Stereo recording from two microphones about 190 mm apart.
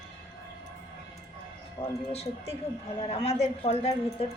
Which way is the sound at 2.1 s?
35° left (ahead or behind).